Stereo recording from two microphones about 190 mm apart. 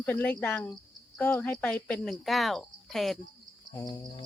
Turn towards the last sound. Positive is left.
turn(degrees=20)  # may be behind; listen again after turning